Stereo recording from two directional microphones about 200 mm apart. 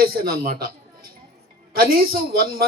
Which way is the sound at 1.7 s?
50° right (ahead or behind).